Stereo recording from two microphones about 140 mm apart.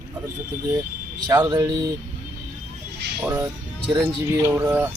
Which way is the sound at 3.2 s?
10° right (ahead or behind).